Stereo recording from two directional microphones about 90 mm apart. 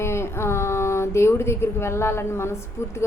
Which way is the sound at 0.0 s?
30° left (ahead or behind).